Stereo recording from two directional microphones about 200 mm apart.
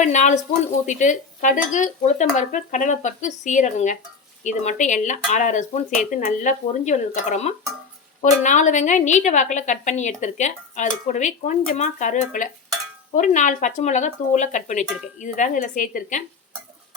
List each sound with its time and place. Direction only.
0.0 s a woman's voice: 35° left (ahead or behind)